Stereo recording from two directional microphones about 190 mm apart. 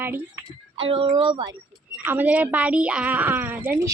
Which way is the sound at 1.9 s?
10° right (ahead or behind).